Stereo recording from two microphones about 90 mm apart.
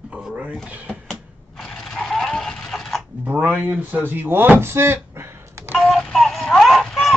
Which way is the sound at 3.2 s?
20° right (ahead or behind).